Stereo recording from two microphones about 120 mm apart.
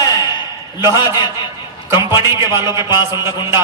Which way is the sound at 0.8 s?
25° right (ahead or behind).